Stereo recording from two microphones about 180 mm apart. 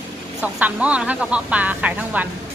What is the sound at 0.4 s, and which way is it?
Speech, 10° right (ahead or behind).